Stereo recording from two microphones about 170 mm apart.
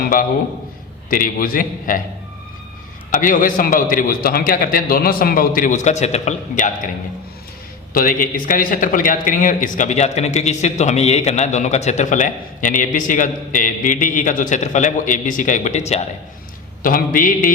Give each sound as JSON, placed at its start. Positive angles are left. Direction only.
{"t": 0.0, "sound": "a man's voice", "side_deg": 55}
{"t": 3.1, "sound": "a man's voice", "side_deg": 50}
{"t": 7.9, "sound": "a man's voice", "side_deg": 55}
{"t": 16.8, "sound": "a man's voice", "side_deg": 55}